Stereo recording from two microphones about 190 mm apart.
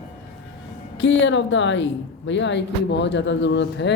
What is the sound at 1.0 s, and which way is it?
A woman's voice, 75° left (ahead or behind).